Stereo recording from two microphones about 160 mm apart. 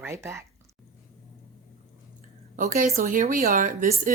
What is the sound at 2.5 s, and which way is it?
A woman's voice, 55° right (ahead or behind).